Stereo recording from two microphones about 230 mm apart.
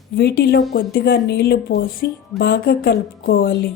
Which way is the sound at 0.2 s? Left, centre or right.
Left.